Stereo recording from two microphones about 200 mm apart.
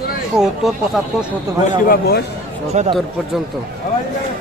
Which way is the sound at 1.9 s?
50° left (ahead or behind).